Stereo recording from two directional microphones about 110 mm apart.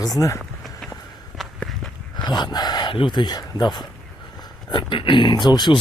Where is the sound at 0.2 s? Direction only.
30° left (ahead or behind).